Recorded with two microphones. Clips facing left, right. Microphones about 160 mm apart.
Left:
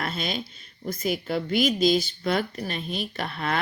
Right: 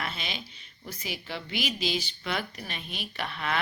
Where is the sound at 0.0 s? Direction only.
40° left (ahead or behind).